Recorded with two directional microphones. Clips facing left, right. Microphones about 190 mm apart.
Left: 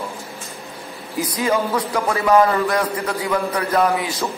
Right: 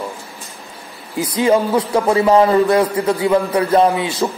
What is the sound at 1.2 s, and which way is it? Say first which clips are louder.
A man's voice: right 5 dB; 25° right (ahead or behind).